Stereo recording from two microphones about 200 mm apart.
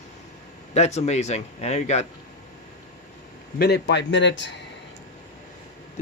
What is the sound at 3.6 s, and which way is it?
Speech, 55° left (ahead or behind).